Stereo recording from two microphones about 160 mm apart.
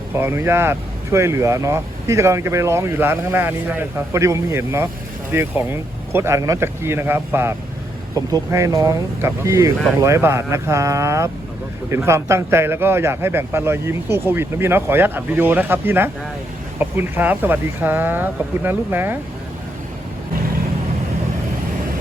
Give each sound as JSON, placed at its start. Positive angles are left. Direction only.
{"t": 0.1, "sound": "speech", "side_deg": -15}